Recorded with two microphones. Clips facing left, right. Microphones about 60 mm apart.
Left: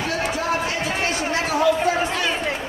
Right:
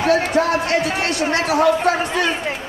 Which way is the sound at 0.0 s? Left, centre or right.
Right.